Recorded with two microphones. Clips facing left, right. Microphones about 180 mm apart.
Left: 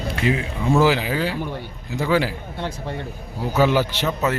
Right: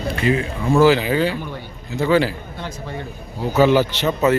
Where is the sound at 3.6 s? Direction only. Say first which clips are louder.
Right 4 dB; 10° left (ahead or behind).